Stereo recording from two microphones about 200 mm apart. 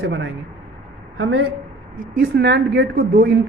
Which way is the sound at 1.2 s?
85° right.